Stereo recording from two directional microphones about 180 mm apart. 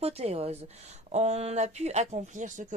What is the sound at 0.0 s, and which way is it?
Speech, 35° right (ahead or behind).